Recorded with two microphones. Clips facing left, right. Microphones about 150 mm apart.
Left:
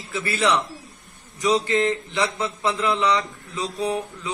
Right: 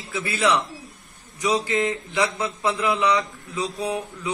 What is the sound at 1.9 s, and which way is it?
Speech, 20° right (ahead or behind).